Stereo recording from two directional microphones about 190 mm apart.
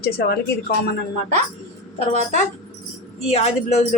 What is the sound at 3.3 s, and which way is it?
Speech, 35° left (ahead or behind).